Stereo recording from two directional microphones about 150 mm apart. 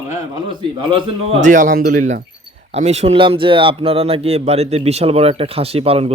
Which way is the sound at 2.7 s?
45° right (ahead or behind).